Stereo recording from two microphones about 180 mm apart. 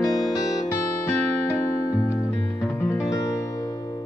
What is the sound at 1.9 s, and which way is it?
Music, 15° left (ahead or behind).